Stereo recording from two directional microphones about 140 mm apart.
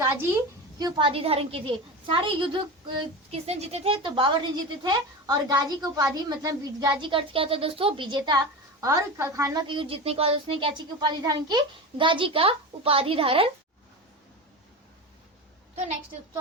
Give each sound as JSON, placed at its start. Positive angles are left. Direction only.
{"t": 0.8, "sound": "a woman's voice", "side_deg": -30}
{"t": 9.6, "sound": "a woman's voice", "side_deg": -40}